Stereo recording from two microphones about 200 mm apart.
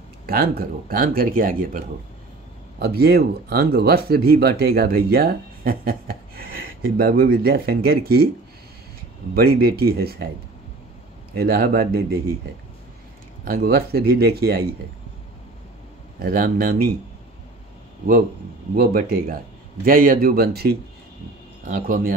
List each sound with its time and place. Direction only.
0.3 s speech: 50° right (ahead or behind)
9.3 s speech: 50° right (ahead or behind)
11.3 s speech: 50° right (ahead or behind)
13.5 s speech: 50° right (ahead or behind)
16.2 s speech: 50° right (ahead or behind)
18.8 s speech: 50° right (ahead or behind)